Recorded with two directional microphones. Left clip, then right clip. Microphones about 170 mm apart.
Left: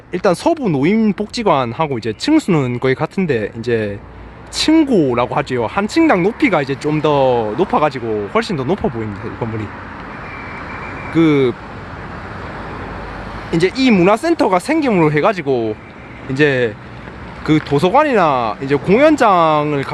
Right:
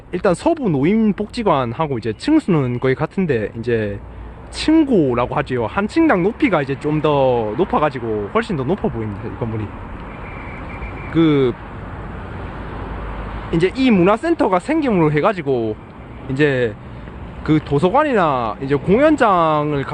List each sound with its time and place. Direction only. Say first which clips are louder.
0.1 s speech: left 2 dB; 15° left (ahead or behind)
11.1 s speech: left 2 dB; 15° left (ahead or behind)
13.5 s speech: left 2 dB; 15° left (ahead or behind)